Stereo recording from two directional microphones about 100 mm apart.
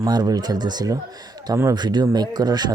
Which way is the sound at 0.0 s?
40° right (ahead or behind).